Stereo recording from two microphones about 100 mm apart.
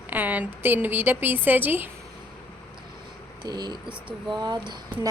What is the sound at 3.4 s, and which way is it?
Speech, 45° right (ahead or behind).